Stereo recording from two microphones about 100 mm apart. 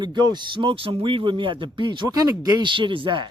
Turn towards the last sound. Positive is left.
turn(degrees=-55)  # may be behind; listen again after turning